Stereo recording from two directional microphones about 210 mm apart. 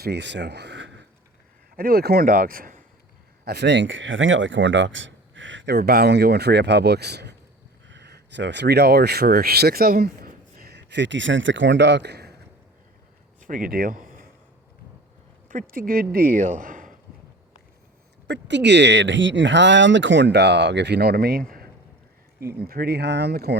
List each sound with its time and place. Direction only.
0.0 s speech: 55° right (ahead or behind)
1.7 s speech: 45° right (ahead or behind)
3.4 s speech: 55° right (ahead or behind)
13.4 s speech: 40° right (ahead or behind)
15.4 s a man's voice: 40° right (ahead or behind)
18.3 s speech: 55° right (ahead or behind)
22.4 s speech: 45° right (ahead or behind)